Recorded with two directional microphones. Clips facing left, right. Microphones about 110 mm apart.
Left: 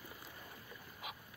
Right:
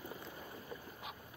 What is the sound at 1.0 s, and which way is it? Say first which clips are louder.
Dog: left 1 dB; 5° left (ahead or behind).